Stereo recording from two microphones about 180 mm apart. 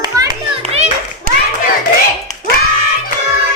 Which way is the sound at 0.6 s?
35° right (ahead or behind).